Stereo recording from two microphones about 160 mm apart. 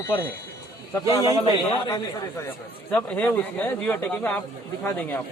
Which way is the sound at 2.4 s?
10° left (ahead or behind).